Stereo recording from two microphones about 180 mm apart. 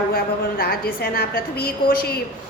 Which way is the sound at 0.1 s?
55° left (ahead or behind).